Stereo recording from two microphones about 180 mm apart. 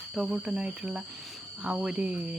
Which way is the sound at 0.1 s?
5° right (ahead or behind).